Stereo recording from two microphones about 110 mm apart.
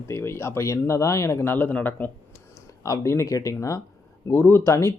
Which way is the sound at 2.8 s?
30° left (ahead or behind).